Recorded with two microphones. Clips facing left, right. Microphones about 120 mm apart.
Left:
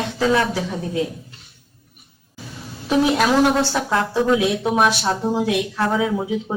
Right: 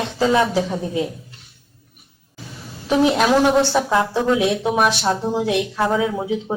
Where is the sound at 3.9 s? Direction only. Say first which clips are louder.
Right 2 dB; 15° right (ahead or behind).